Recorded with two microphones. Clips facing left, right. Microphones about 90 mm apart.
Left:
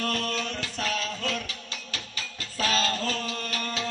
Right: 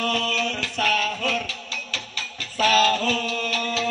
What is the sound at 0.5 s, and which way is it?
Music, 55° right (ahead or behind).